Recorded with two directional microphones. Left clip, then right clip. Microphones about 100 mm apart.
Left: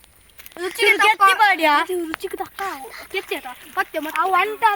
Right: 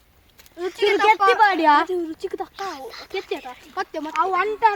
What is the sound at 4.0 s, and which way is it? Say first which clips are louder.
Speech: left 2 dB; 10° left (ahead or behind).